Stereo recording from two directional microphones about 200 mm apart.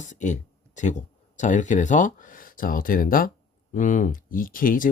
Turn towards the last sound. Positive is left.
turn(degrees=45)  # may be behind; listen again after turning